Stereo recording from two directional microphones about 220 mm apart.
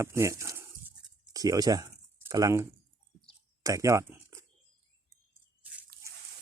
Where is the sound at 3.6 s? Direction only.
15° right (ahead or behind).